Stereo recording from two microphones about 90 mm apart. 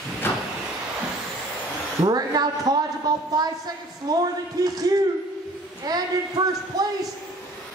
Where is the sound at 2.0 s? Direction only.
50° right (ahead or behind).